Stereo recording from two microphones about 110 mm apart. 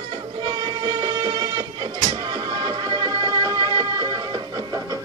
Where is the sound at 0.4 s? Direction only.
40° right (ahead or behind).